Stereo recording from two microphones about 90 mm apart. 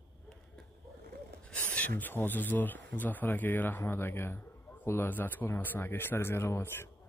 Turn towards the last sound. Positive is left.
turn(degrees=30)  # may be behind; listen again after turning